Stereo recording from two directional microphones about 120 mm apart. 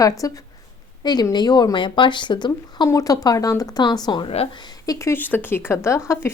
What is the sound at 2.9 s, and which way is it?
A woman's voice, 30° left (ahead or behind).